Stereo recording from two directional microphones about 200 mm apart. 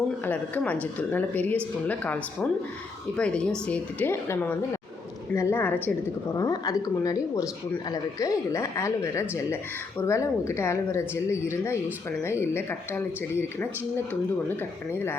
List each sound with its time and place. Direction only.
0.3 s a woman's voice: 10° left (ahead or behind)